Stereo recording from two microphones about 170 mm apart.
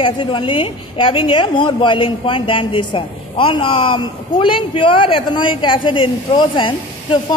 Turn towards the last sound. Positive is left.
turn(degrees=30)  # may be behind; listen again after turning